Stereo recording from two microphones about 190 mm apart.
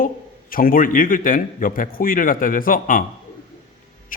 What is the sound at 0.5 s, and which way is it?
A man's voice, 50° left (ahead or behind).